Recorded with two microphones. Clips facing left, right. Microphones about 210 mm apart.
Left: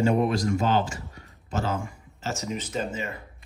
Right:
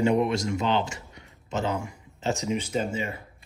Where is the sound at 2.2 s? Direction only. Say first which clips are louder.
Right 4 dB; 15° right (ahead or behind).